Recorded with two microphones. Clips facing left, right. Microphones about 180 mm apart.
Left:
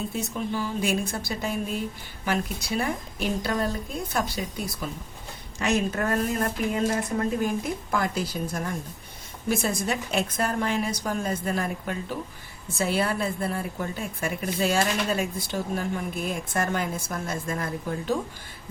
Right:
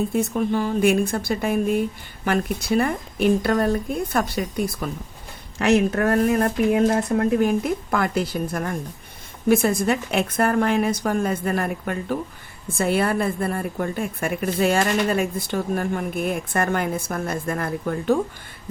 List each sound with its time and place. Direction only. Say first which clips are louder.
0.1 s a woman's voice: right 8 dB; 55° right (ahead or behind)